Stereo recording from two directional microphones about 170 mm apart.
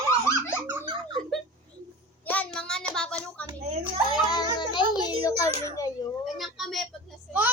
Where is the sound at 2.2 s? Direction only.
10° left (ahead or behind).